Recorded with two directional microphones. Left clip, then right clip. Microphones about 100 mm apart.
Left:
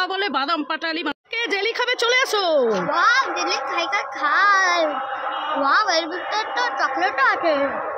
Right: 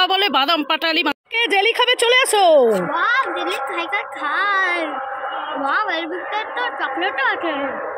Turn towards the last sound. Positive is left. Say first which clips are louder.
# left 2 dB
turn(degrees=35)  # may be behind; listen again after turning